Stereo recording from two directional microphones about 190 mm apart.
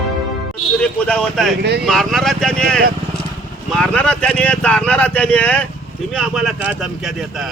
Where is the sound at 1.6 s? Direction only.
60° right (ahead or behind).